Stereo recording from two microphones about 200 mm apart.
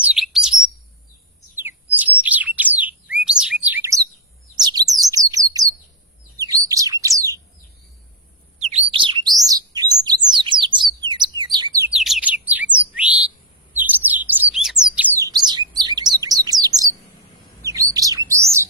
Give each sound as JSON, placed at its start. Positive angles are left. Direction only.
{"t": 0.0, "sound": "chirp", "side_deg": -5}
{"t": 1.6, "sound": "bird", "side_deg": -10}
{"t": 4.5, "sound": "chirp", "side_deg": -20}
{"t": 6.4, "sound": "bird", "side_deg": -15}
{"t": 8.5, "sound": "bird", "side_deg": -30}
{"t": 11.9, "sound": "bird", "side_deg": 0}
{"t": 13.7, "sound": "chirp", "side_deg": -10}
{"t": 15.2, "sound": "chirp", "side_deg": -20}
{"t": 17.9, "sound": "bird", "side_deg": -15}